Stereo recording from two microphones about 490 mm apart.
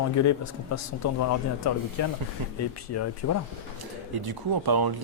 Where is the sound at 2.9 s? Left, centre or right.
Left.